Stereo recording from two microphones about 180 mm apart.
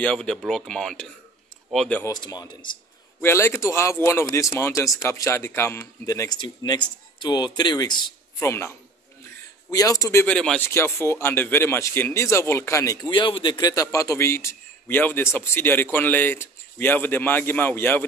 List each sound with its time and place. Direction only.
0.0 s speech: 5° left (ahead or behind)
2.1 s speech: 25° left (ahead or behind)
3.2 s speech: 15° left (ahead or behind)
10.2 s speech: 5° left (ahead or behind)